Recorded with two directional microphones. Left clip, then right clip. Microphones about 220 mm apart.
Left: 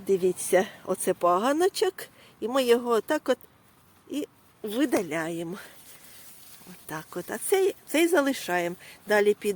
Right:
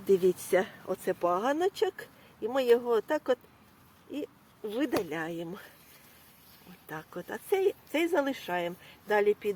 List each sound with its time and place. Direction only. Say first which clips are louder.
0.0 s speech: even; 10° left (ahead or behind)
0.5 s speech: left 4 dB; 30° left (ahead or behind); by 5.6 s 45° left (ahead or behind)
6.8 s speech: left 5 dB; 50° left (ahead or behind)